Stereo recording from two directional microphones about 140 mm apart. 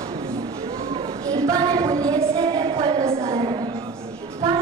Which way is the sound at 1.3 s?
25° right (ahead or behind).